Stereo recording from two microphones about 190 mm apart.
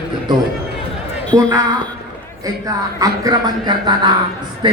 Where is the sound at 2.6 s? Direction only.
20° right (ahead or behind).